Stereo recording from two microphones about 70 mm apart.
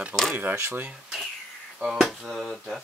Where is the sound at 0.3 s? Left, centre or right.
Right.